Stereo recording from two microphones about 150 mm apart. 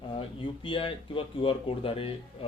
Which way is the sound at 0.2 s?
35° left (ahead or behind).